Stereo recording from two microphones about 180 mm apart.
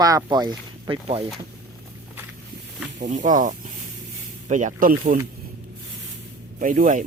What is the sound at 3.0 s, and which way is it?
Speech, 45° right (ahead or behind).